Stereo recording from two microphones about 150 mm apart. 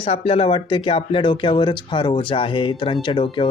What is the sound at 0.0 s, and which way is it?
Speech, 40° left (ahead or behind).